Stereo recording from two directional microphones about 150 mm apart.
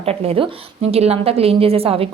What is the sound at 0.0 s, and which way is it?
A woman's voice, 40° right (ahead or behind).